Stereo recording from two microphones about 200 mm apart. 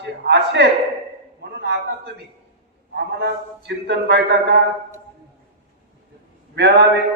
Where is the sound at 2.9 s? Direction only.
60° right (ahead or behind).